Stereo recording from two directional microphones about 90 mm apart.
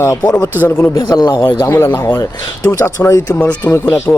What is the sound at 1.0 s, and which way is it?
Speech, 45° left (ahead or behind).